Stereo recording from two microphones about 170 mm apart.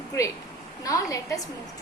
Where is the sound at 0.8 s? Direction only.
20° left (ahead or behind).